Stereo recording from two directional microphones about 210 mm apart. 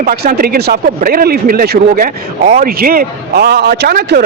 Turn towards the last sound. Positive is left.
turn(degrees=-50)  # may be behind; listen again after turning